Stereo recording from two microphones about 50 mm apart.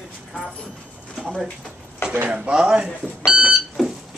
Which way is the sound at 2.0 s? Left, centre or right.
Left.